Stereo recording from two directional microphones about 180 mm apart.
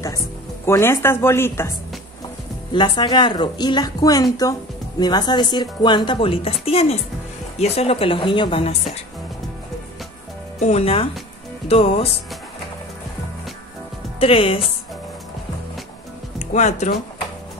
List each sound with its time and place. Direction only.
0.7 s speech: 15° left (ahead or behind)
2.7 s a woman's voice: 25° left (ahead or behind)
10.6 s a woman's voice: 35° left (ahead or behind)
14.2 s a woman's voice: 30° left (ahead or behind)
16.3 s speech: 40° left (ahead or behind)